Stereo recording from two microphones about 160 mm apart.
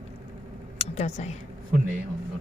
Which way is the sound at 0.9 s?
45° left (ahead or behind).